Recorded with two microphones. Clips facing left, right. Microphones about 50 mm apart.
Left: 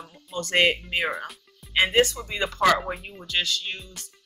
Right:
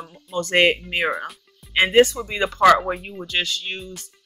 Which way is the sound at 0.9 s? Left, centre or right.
Right.